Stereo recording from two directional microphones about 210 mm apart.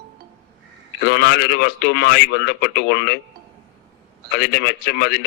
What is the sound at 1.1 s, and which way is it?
Speech, 50° left (ahead or behind).